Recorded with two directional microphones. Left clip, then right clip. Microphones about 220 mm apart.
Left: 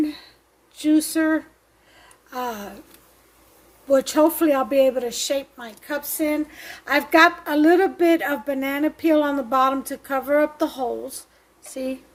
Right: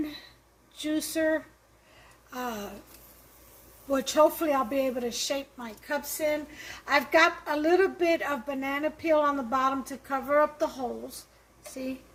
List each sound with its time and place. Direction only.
0.8 s speech: 45° left (ahead or behind)
3.9 s speech: 50° left (ahead or behind)